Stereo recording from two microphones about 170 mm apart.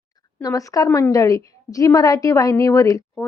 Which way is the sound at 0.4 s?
20° left (ahead or behind).